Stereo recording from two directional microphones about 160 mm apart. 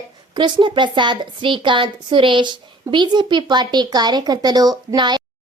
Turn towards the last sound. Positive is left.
turn(degrees=-25)  # may be behind; listen again after turning